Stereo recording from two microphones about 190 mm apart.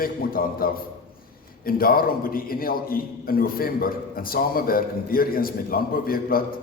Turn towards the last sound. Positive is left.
turn(degrees=50)  # may be behind; listen again after turning